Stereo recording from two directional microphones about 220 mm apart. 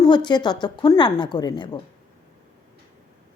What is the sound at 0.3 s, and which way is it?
A woman's voice, 20° left (ahead or behind).